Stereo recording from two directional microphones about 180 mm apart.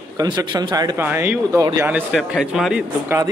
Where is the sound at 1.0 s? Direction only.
10° right (ahead or behind).